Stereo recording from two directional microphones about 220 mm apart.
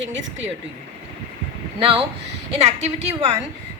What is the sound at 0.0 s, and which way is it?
Speech, 55° right (ahead or behind).